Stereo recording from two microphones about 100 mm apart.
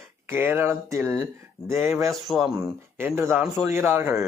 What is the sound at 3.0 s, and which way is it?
Speech, 25° right (ahead or behind).